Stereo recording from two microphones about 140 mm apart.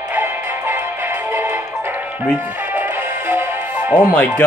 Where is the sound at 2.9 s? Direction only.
20° right (ahead or behind).